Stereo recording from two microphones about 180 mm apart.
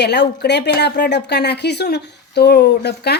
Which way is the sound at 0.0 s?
70° left (ahead or behind).